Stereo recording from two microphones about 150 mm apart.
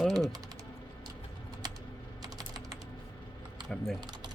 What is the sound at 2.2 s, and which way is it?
Typing, 25° right (ahead or behind).